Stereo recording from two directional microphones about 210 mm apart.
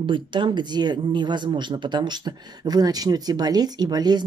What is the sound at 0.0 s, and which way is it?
Speech, 25° right (ahead or behind).